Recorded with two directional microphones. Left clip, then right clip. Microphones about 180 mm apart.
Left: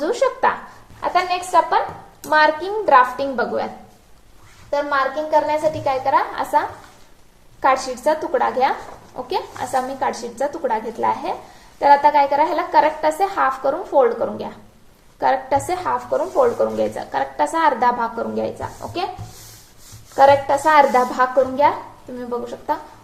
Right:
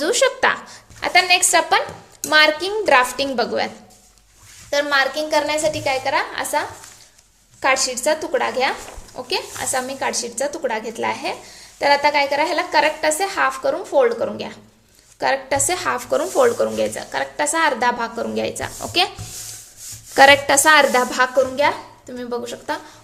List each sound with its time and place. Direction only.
0.0 s speech: 25° right (ahead or behind)
1.0 s a sound: 30° right (ahead or behind)
2.2 s a woman's voice: 30° right (ahead or behind)
4.7 s a woman's voice: 25° right (ahead or behind)
15.9 s speech: 35° right (ahead or behind)
16.6 s a woman's voice: 10° right (ahead or behind)
20.1 s speech: 40° right (ahead or behind)
20.7 s a woman's voice: 20° right (ahead or behind)